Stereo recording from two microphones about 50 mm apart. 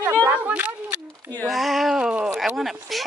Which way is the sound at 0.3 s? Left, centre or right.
Right.